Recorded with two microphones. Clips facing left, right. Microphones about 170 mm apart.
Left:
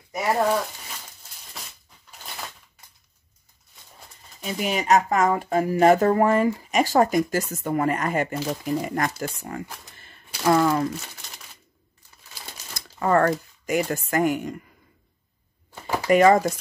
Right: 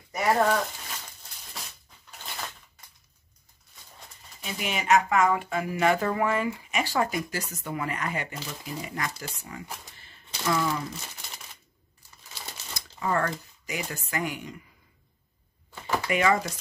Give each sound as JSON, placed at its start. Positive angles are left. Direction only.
{"t": 4.5, "sound": "speech", "side_deg": 40}
{"t": 9.9, "sound": "a sound", "side_deg": 50}
{"t": 12.7, "sound": "speech", "side_deg": 55}
{"t": 16.1, "sound": "speech", "side_deg": 45}